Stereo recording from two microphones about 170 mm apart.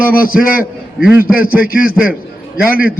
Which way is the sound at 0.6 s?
10° right (ahead or behind).